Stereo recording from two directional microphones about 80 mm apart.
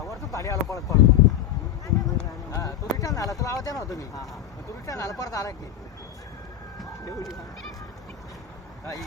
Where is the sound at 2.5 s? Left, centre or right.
Left.